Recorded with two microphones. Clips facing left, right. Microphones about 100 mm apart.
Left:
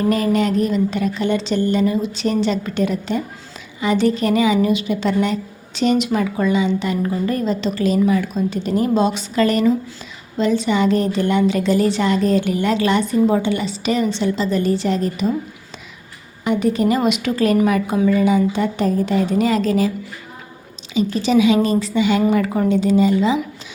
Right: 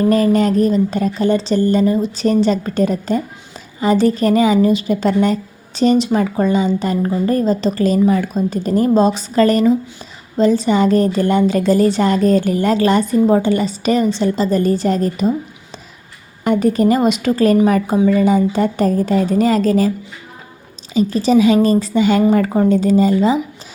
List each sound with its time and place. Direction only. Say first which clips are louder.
0.1 s a woman's voice: right 4 dB; 40° right (ahead or behind)
16.4 s a woman's voice: right 3 dB; 45° right (ahead or behind)
20.9 s a woman's voice: right 3 dB; 40° right (ahead or behind)